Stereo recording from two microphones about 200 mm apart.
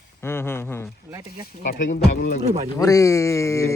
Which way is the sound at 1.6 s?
50° left (ahead or behind).